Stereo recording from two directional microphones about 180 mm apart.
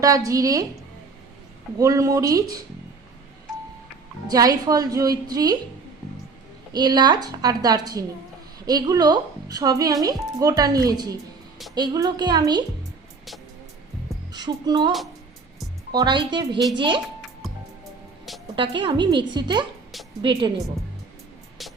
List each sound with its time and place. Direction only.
0.0 s a woman's voice: 20° right (ahead or behind)
1.8 s a woman's voice: 20° right (ahead or behind)
4.3 s a woman's voice: 20° right (ahead or behind)
6.7 s a woman's voice: 25° right (ahead or behind)
14.3 s a woman's voice: 20° right (ahead or behind)
17.4 s music: centre (ahead or behind)
18.5 s a woman's voice: 30° right (ahead or behind)
21.6 s music: centre (ahead or behind)